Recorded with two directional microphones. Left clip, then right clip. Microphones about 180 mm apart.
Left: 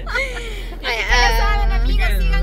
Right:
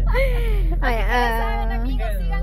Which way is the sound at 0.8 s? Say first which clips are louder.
Left 4 dB; 45° right (ahead or behind).